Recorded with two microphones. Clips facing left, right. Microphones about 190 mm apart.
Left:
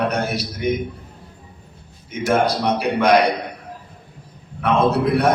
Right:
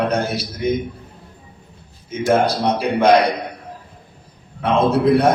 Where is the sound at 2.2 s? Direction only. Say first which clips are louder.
Right 2 dB; 30° right (ahead or behind).